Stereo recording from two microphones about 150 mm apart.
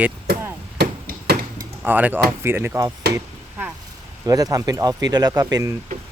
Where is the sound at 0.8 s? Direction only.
90° right.